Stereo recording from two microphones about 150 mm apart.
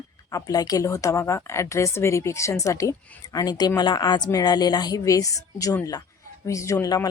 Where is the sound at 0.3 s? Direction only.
20° left (ahead or behind).